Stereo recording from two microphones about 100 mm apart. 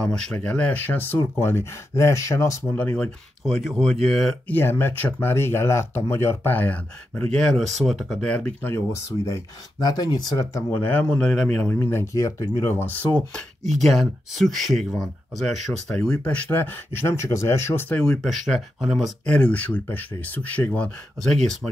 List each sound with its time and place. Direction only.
0.0 s speech: 5° left (ahead or behind); by 2.6 s 30° left (ahead or behind)
2.7 s speech: 15° left (ahead or behind)
3.4 s speech: centre (ahead or behind)
4.5 s speech: 20° left (ahead or behind)
7.3 s speech: 5° left (ahead or behind)
8.3 s speech: 15° left (ahead or behind)
8.7 s speech: 30° left (ahead or behind)
9.8 s speech: 45° left (ahead or behind)
10.7 s speech: 20° left (ahead or behind)
11.7 s speech: 25° left (ahead or behind)
13.8 s speech: centre (ahead or behind); by 18.0 s 20° left (ahead or behind)
18.2 s speech: centre (ahead or behind)
19.3 s speech: 15° left (ahead or behind)
21.2 s speech: 5° left (ahead or behind)